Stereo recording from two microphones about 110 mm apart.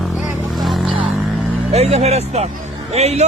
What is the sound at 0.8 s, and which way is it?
Vehicle, 50° right (ahead or behind).